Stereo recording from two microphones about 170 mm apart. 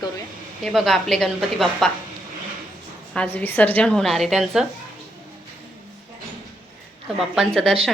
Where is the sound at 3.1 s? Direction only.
10° left (ahead or behind).